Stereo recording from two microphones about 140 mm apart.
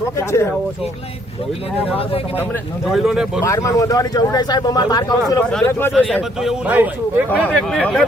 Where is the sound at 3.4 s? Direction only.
20° left (ahead or behind).